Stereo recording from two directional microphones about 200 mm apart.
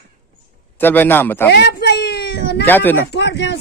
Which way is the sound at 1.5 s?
55° left (ahead or behind).